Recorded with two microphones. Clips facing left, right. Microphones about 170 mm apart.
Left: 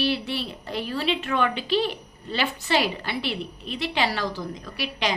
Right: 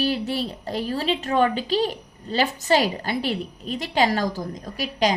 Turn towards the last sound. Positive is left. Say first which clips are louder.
# right 5 dB
turn(degrees=-40)  # may be behind; listen again after turning